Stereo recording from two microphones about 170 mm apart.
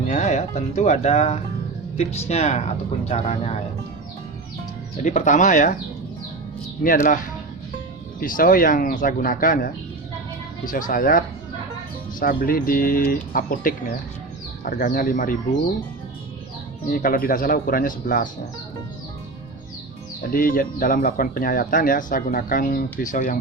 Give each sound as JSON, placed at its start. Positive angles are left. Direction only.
{"t": 0.1, "sound": "speech", "side_deg": 45}
{"t": 5.0, "sound": "speech", "side_deg": 45}
{"t": 6.8, "sound": "speech", "side_deg": 55}
{"t": 12.2, "sound": "speech", "side_deg": 60}
{"t": 16.9, "sound": "speech", "side_deg": 55}
{"t": 20.3, "sound": "speech", "side_deg": 55}